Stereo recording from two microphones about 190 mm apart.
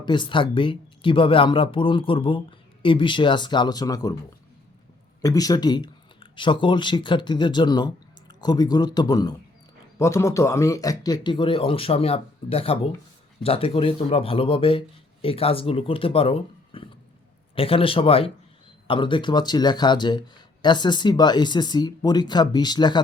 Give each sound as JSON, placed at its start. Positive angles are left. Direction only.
{"t": 0.0, "sound": "speech", "side_deg": 25}
{"t": 5.2, "sound": "speech", "side_deg": 20}